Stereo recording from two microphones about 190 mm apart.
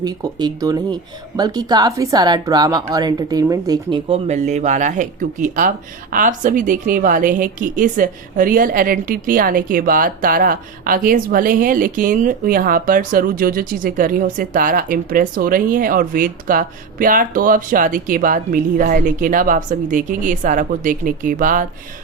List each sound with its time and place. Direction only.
0.0 s speech: 20° right (ahead or behind)
4.3 s speech: 40° right (ahead or behind)